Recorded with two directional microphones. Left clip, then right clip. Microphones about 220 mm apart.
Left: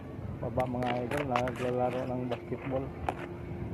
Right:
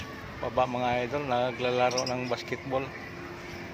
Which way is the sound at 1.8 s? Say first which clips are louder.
Right 5 dB; 35° right (ahead or behind).